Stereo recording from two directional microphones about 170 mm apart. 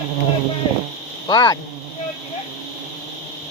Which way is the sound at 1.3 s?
25° left (ahead or behind).